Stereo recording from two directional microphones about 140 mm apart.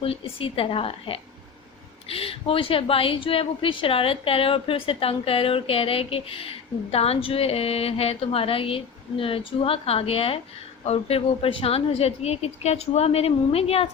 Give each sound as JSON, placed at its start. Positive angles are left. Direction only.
{"t": 0.0, "sound": "a woman's voice", "side_deg": 40}